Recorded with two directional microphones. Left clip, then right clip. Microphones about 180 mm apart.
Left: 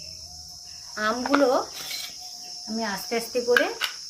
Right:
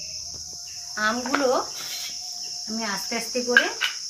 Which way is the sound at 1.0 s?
45° left (ahead or behind).